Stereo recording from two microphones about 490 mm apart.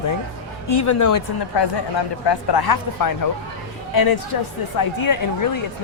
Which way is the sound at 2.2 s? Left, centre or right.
Left.